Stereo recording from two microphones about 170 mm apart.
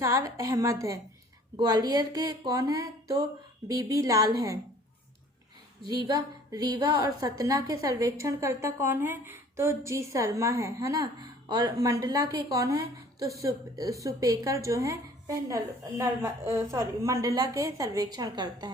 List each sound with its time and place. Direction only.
0.0 s a woman's voice: 15° right (ahead or behind)
5.9 s a woman's voice: 20° right (ahead or behind)